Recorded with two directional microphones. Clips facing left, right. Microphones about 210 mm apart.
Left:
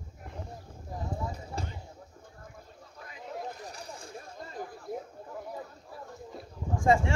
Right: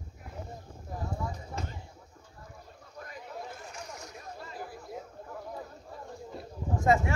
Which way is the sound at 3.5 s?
35° left (ahead or behind).